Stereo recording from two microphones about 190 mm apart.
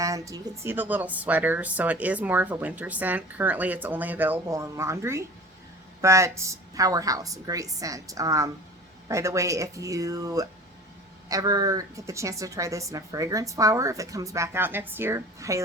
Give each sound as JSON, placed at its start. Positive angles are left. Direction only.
{"t": 0.0, "sound": "speech", "side_deg": -15}